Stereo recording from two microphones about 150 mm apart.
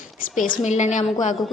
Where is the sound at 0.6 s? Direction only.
50° left (ahead or behind).